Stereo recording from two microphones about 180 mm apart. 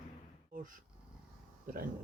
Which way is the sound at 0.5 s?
50° right (ahead or behind).